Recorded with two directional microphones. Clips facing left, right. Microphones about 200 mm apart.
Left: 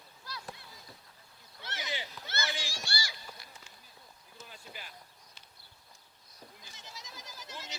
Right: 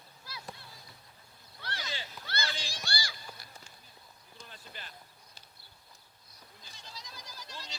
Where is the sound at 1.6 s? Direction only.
20° left (ahead or behind).